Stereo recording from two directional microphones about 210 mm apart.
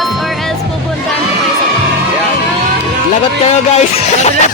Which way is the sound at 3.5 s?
30° left (ahead or behind).